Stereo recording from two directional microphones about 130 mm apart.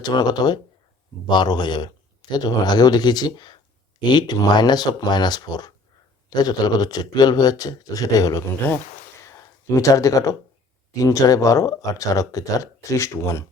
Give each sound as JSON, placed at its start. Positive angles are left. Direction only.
{"t": 0.0, "sound": "speech", "side_deg": 35}
{"t": 9.2, "sound": "a sound", "side_deg": 25}
{"t": 10.9, "sound": "speech", "side_deg": 25}